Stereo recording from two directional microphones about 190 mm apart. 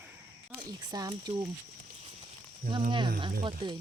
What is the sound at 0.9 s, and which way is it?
Speech, 20° right (ahead or behind).